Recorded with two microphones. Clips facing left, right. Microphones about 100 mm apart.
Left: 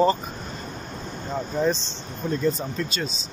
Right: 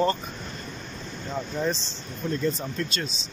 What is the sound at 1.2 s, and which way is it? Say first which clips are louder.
Speech: left 3 dB; 15° left (ahead or behind).